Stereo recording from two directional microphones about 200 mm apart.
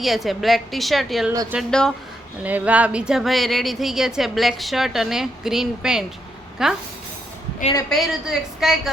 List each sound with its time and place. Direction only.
0.0 s speech: centre (ahead or behind)
1.3 s speech: 15° right (ahead or behind)
1.5 s speech: 5° left (ahead or behind)
2.4 s speech: 5° right (ahead or behind)
7.9 s speech: centre (ahead or behind)